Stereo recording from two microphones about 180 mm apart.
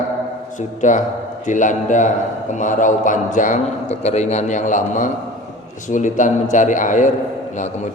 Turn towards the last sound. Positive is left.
turn(degrees=40)  # may be behind; listen again after turning